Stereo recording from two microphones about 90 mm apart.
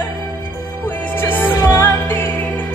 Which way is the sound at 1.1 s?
25° left (ahead or behind).